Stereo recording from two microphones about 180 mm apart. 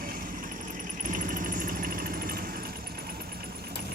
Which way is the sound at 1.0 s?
45° right (ahead or behind).